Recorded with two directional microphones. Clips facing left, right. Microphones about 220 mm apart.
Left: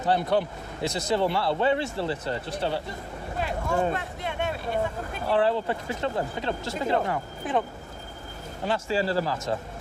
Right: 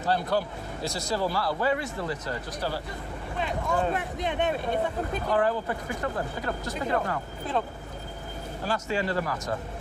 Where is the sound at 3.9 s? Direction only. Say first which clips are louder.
Right 2 dB; 15° right (ahead or behind).